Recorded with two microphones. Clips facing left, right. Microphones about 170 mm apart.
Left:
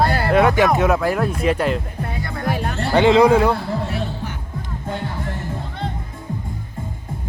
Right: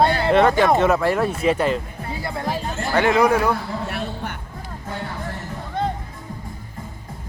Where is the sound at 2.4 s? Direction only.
65° left (ahead or behind).